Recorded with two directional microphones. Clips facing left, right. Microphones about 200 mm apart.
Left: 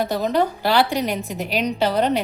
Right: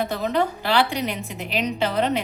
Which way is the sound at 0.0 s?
40° left (ahead or behind).